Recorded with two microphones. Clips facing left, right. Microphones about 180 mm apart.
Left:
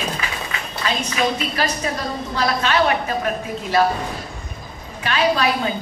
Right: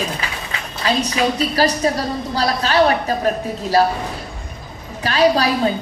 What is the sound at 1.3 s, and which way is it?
A woman's voice, 35° right (ahead or behind).